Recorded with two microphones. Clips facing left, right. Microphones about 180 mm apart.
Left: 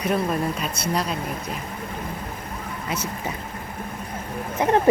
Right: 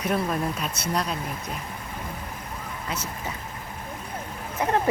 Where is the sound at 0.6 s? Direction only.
Centre (ahead or behind).